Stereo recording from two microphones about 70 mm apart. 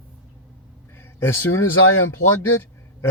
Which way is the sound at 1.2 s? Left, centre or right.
Left.